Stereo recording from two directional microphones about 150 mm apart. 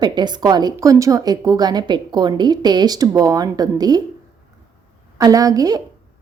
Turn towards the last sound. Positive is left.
turn(degrees=-25)  # may be behind; listen again after turning